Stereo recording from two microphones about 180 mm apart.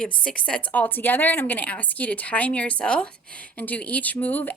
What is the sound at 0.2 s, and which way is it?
A woman's voice, 5° left (ahead or behind).